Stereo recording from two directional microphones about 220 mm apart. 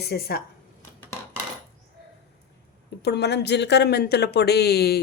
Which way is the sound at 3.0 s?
50° left (ahead or behind).